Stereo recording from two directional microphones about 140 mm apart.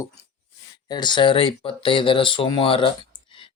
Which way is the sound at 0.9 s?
30° left (ahead or behind).